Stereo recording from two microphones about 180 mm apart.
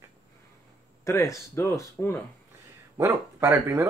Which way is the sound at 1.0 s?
15° left (ahead or behind).